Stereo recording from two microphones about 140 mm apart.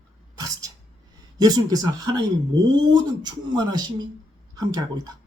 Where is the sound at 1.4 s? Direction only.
25° right (ahead or behind).